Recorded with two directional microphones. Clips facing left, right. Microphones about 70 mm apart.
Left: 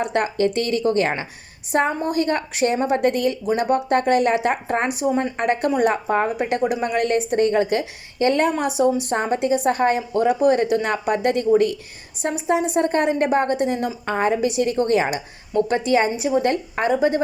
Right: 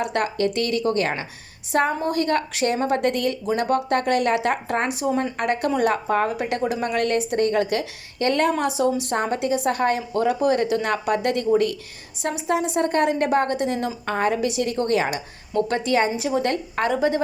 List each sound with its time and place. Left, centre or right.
0.0 s a woman's voice: left
2.0 s a woman's voice: centre